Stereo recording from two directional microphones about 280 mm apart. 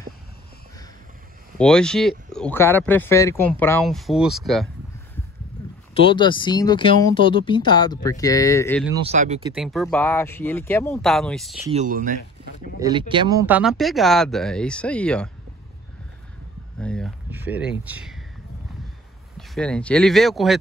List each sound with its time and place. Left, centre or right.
1.6 s speech: centre
5.9 s speech: centre
9.0 s speech: right
9.6 s speech: centre
11.7 s speech: right
12.7 s speech: centre
16.8 s speech: centre
19.3 s speech: centre